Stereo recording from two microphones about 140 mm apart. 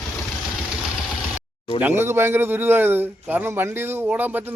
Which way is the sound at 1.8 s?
15° right (ahead or behind).